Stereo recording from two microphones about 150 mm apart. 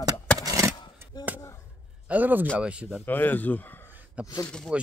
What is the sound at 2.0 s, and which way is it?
Speech, 10° right (ahead or behind).